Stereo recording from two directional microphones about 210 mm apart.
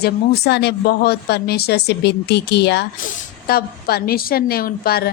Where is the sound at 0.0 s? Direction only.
50° left (ahead or behind).